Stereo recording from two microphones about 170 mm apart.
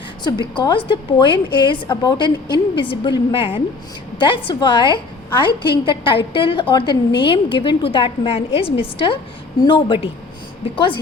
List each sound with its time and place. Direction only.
0.3 s a woman's voice: 25° left (ahead or behind)